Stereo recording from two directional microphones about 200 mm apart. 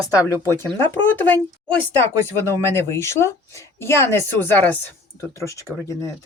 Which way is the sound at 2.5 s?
15° left (ahead or behind).